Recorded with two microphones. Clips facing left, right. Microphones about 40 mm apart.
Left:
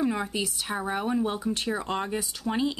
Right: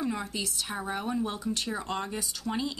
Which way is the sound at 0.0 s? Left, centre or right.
Centre.